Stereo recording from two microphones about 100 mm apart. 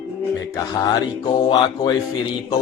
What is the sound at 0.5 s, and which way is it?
Music, 40° left (ahead or behind).